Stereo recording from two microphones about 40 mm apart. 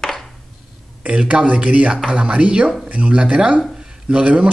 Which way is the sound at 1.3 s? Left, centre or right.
Right.